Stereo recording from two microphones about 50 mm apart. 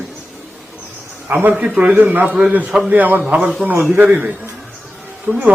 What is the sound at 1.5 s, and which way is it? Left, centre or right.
Speech, right.